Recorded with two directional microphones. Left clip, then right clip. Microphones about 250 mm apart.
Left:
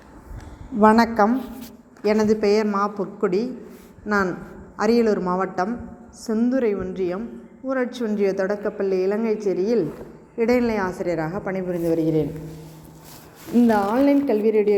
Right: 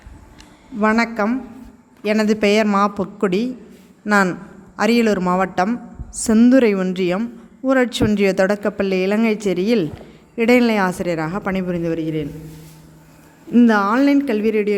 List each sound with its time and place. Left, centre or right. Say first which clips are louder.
0.8 s a woman's voice: left 2 dB; centre
1.1 s a man's voice: left 2 dB; right
2.0 s speech: right 2 dB; right
11.9 s a man's voice: left 4 dB; right
13.5 s speech: right 4 dB; right